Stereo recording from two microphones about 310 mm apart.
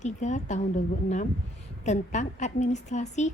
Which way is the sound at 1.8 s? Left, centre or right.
Left.